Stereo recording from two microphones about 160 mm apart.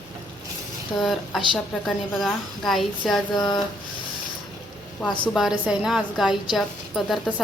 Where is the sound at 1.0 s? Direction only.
Centre (ahead or behind).